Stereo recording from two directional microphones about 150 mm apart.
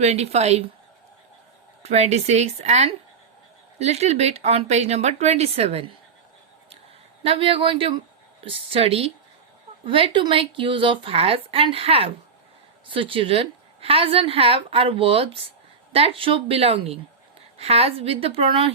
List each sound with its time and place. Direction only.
0.0 s speech: 45° right (ahead or behind)
1.8 s speech: 45° right (ahead or behind)
7.2 s a woman's voice: 40° right (ahead or behind)